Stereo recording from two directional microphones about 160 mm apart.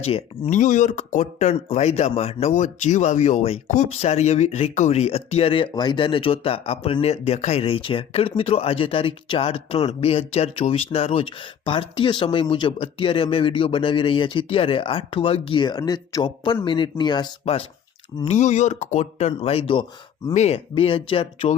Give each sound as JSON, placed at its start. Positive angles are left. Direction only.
{"t": 0.0, "sound": "speech", "side_deg": 40}
{"t": 0.6, "sound": "speech", "side_deg": 55}
{"t": 18.3, "sound": "speech", "side_deg": 45}